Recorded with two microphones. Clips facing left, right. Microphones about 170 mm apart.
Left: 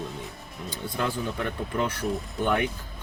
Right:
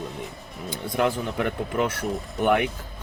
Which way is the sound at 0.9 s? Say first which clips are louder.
Right 5 dB; 15° right (ahead or behind).